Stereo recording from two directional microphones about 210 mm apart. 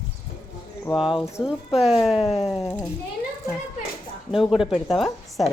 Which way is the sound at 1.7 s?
Centre (ahead or behind).